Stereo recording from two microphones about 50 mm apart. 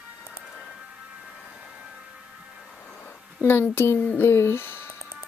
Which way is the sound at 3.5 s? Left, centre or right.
Left.